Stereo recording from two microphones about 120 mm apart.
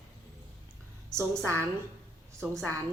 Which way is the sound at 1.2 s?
20° right (ahead or behind).